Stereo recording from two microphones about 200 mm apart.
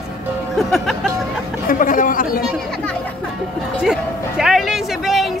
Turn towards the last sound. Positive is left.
turn(degrees=0)  # may be behind; listen again after turning